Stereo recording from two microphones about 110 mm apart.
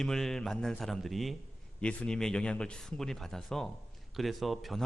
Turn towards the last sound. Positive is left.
turn(degrees=0)  # may be behind; listen again after turning